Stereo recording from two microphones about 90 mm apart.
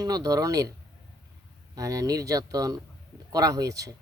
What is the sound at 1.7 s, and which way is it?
Speech, 40° right (ahead or behind).